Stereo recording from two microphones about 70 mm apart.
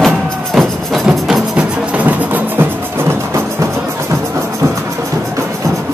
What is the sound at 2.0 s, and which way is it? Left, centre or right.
Music, right.